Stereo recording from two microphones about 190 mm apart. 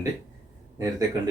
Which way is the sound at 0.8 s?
20° right (ahead or behind).